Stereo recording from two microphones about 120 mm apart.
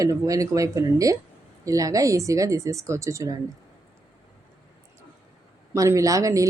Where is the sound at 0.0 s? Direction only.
30° right (ahead or behind).